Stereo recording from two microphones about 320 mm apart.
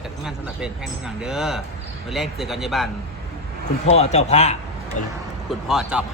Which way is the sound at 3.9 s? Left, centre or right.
Centre.